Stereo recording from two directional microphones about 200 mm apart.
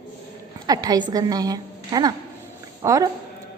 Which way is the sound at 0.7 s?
20° right (ahead or behind).